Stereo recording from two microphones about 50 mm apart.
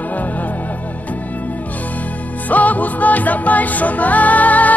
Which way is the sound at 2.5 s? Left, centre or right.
Left.